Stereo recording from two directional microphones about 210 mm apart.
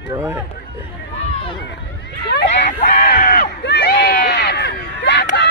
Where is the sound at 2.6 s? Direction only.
40° left (ahead or behind).